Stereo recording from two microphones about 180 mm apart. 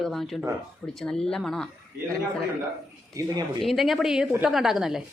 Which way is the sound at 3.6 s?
Centre (ahead or behind).